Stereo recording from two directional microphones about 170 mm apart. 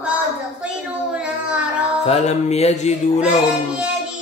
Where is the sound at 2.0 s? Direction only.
40° left (ahead or behind).